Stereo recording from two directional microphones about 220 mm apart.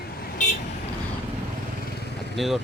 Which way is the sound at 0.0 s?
45° left (ahead or behind).